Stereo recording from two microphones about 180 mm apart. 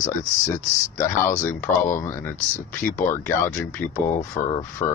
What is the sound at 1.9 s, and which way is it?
Speech, 15° left (ahead or behind).